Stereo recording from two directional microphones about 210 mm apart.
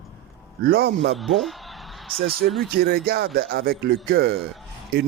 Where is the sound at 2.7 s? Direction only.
45° right (ahead or behind).